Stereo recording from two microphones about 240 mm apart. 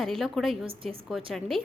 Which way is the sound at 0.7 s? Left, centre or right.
Right.